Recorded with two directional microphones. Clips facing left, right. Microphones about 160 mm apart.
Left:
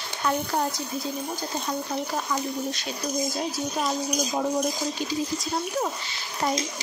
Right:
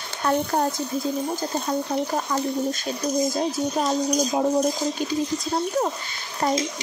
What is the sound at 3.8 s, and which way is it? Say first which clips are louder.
Speech: right 5 dB; 35° right (ahead or behind).